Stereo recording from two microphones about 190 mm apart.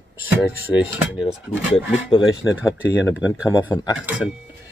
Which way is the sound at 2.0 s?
25° left (ahead or behind).